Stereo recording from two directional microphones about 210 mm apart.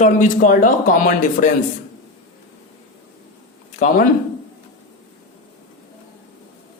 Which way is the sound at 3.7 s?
40° left (ahead or behind).